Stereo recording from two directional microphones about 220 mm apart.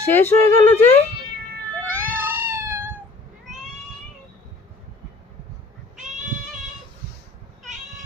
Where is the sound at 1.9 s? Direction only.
10° right (ahead or behind).